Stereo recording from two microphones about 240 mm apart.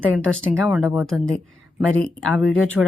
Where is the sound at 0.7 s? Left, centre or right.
Centre.